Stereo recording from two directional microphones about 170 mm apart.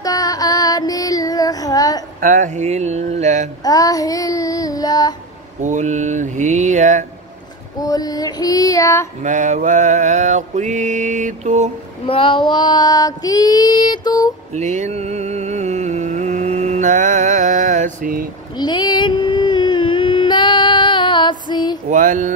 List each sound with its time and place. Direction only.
0.0 s child singing: 20° left (ahead or behind)
2.1 s mantra: 50° right (ahead or behind)
3.6 s female singing: 20° left (ahead or behind)
5.6 s mantra: 45° right (ahead or behind)
7.8 s female singing: 25° left (ahead or behind)
9.2 s mantra: 45° right (ahead or behind)
12.1 s female singing: 30° left (ahead or behind)
14.5 s music: 45° right (ahead or behind)
18.6 s a sound: 25° left (ahead or behind)
21.8 s mantra: 50° right (ahead or behind)